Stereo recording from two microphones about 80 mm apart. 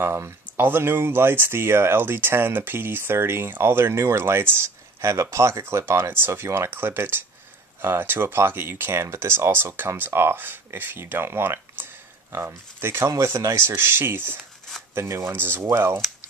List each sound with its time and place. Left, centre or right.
0.0 s speech: right
13.7 s speech: right